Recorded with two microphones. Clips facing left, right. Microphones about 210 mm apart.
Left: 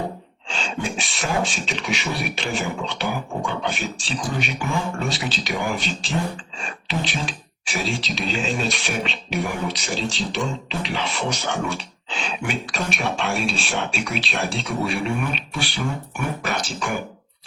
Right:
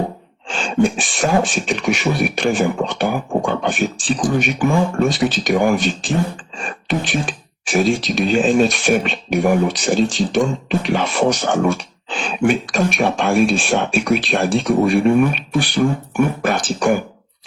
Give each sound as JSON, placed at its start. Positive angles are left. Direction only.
{"t": 0.4, "sound": "speech", "side_deg": -45}